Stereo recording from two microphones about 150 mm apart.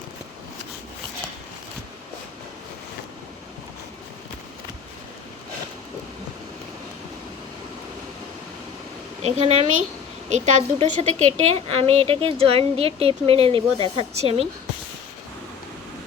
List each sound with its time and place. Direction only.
9.2 s a woman's voice: 45° right (ahead or behind)